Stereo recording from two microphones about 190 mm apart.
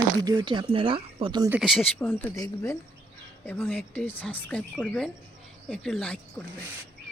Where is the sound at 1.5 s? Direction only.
Centre (ahead or behind).